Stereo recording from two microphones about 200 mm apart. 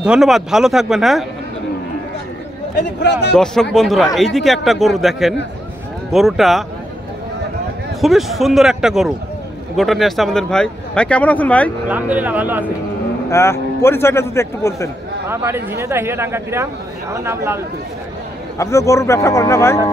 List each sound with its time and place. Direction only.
0.0 s speech: 5° right (ahead or behind)
2.7 s speech: 55° left (ahead or behind)
3.7 s speech: centre (ahead or behind)
8.0 s speech: centre (ahead or behind)
11.9 s speech: 10° right (ahead or behind)
13.3 s a man's voice: 15° left (ahead or behind)
15.2 s speech: 10° right (ahead or behind)
18.6 s a man's voice: 15° left (ahead or behind)